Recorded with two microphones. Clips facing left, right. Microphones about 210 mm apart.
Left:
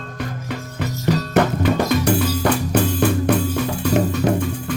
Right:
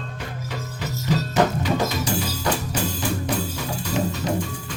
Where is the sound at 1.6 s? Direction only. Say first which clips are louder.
Left 6 dB; 60° left (ahead or behind).